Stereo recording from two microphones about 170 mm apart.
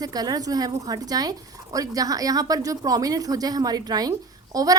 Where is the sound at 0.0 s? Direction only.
20° right (ahead or behind).